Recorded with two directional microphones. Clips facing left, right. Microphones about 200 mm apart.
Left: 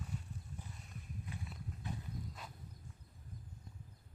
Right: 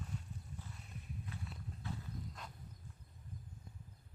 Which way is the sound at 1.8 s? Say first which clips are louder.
Even; 15° left (ahead or behind).